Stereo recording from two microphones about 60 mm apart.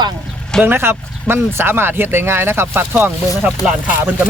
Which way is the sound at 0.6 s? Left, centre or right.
Right.